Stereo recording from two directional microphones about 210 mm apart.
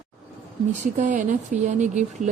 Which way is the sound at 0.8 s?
35° right (ahead or behind).